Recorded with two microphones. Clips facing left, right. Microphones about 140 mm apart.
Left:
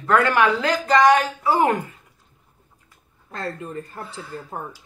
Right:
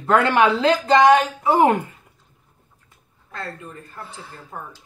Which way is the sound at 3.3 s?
35° left (ahead or behind).